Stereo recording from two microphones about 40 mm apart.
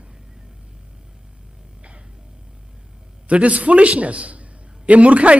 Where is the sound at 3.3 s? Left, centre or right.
Right.